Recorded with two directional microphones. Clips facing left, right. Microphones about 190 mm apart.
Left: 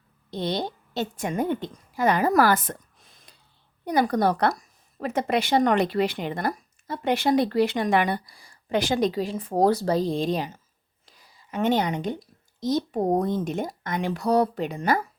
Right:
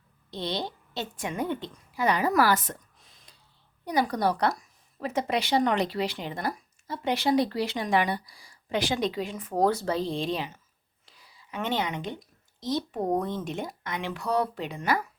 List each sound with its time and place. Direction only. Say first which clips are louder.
0.3 s a woman's voice: left 4 dB; 45° left (ahead or behind)
3.8 s a woman's voice: left 4 dB; 55° left (ahead or behind)
11.0 s whispering: left 1 dB; 45° left (ahead or behind)
12.5 s speech: left 5 dB; 45° left (ahead or behind)